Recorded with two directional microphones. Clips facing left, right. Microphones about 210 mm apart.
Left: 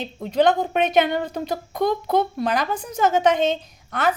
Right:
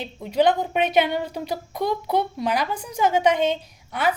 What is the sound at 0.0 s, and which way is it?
A woman's voice, 10° right (ahead or behind).